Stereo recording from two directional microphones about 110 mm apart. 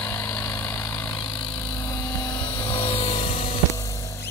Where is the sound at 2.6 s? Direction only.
55° left (ahead or behind).